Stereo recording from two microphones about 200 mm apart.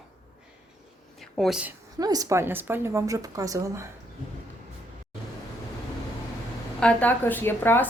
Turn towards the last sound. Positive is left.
turn(degrees=10)  # may be behind; listen again after turning